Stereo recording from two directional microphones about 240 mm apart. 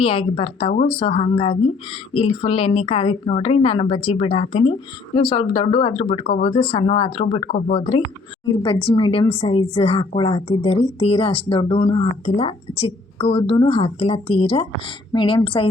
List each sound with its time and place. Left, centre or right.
0.0 s a woman's voice: left